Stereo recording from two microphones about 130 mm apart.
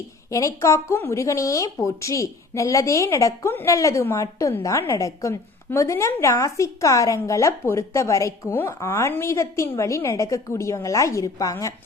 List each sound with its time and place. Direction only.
0.3 s speech: 25° left (ahead or behind)